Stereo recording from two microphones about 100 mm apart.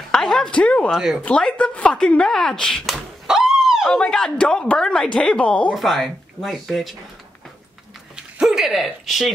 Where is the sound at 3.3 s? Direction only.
5° right (ahead or behind).